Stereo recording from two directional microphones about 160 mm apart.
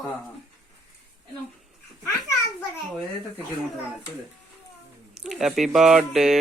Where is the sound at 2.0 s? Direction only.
15° left (ahead or behind).